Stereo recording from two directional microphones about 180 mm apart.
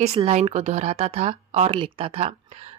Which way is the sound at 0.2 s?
35° right (ahead or behind).